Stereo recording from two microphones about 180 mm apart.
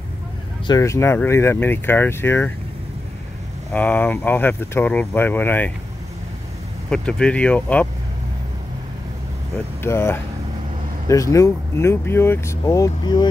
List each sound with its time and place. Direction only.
0.7 s speech: 15° left (ahead or behind)
3.7 s speech: 10° left (ahead or behind)
6.9 s speech: 5° left (ahead or behind)
9.8 s speech: 15° left (ahead or behind)